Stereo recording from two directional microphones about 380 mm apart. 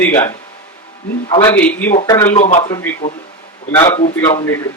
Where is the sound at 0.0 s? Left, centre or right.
Centre.